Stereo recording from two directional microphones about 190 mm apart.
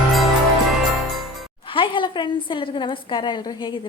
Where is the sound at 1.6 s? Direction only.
25° left (ahead or behind).